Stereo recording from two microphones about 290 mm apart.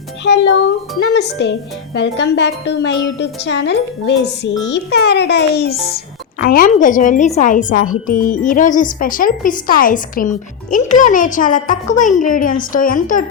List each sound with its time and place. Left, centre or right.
1.1 s speech: left